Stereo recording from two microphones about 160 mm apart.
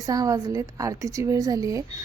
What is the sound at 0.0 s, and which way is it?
A woman's voice, 20° right (ahead or behind).